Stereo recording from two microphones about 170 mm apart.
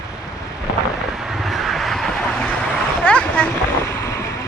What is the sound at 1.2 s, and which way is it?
Vehicle, centre (ahead or behind).